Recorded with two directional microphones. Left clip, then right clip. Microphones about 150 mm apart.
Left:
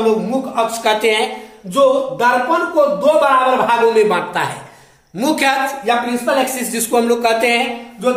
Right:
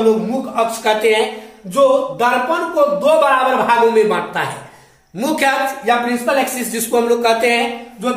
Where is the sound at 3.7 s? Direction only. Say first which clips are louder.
Even; 25° left (ahead or behind).